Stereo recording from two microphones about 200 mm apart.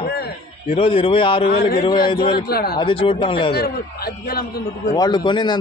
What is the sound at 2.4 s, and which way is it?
Speech, 50° left (ahead or behind).